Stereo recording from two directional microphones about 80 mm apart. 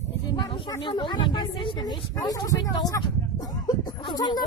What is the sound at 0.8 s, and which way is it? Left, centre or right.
Speech, left.